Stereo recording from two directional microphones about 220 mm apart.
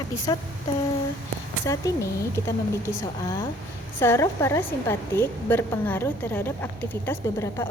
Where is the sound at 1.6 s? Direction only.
15° left (ahead or behind).